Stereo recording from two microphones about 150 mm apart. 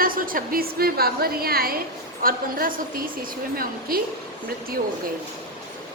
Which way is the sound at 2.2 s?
70° right (ahead or behind).